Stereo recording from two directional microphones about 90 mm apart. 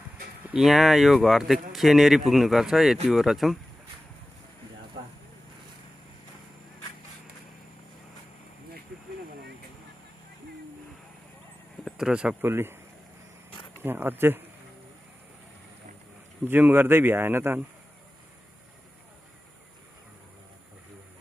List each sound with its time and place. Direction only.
0.5 s speech: 5° right (ahead or behind)
11.8 s a sound: 10° right (ahead or behind)
12.4 s speech: 25° right (ahead or behind)
13.8 s speech: 25° right (ahead or behind)
16.4 s speech: 20° right (ahead or behind)